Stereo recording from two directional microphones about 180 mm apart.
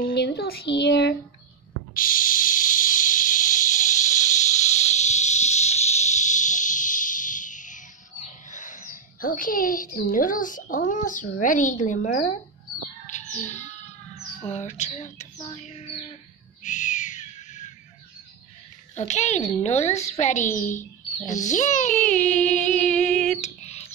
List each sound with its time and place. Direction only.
0.0 s a child's voice: 60° left (ahead or behind)
2.0 s snake: 50° left (ahead or behind)
10.9 s speech: 45° left (ahead or behind)
13.0 s bird: 40° left (ahead or behind)
14.4 s a woman's voice: 40° left (ahead or behind)
16.6 s owl: 45° left (ahead or behind)
18.9 s a woman's voice: 40° left (ahead or behind)
22.6 s female singing: 5° left (ahead or behind)
23.4 s a sound: 35° left (ahead or behind)